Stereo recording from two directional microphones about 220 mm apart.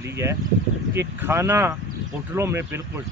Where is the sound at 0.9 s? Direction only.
10° right (ahead or behind).